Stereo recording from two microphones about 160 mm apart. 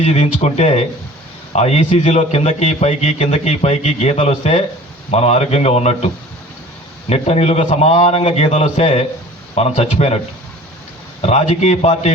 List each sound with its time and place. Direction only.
0.0 s a man's voice: 45° left (ahead or behind)
7.1 s a man's voice: 40° left (ahead or behind)
11.2 s a man's voice: 40° left (ahead or behind)